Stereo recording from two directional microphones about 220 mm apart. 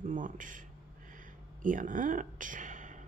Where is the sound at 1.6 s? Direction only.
35° right (ahead or behind).